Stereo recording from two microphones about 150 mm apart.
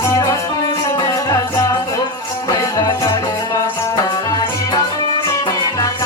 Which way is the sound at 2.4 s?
25° left (ahead or behind).